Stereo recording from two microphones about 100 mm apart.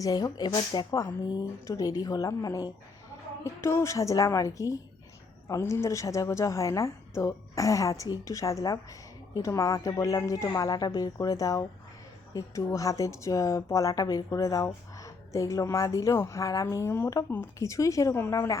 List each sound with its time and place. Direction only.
0.0 s speech: 40° left (ahead or behind)
0.9 s a woman's voice: 35° left (ahead or behind)
3.4 s a woman's voice: 25° left (ahead or behind)